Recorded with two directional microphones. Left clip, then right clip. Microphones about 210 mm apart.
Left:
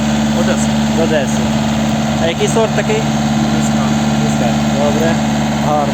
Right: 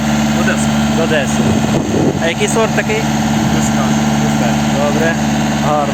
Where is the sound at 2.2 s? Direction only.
5° left (ahead or behind).